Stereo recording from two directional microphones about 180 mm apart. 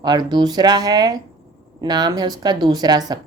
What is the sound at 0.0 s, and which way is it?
Speech, 25° right (ahead or behind).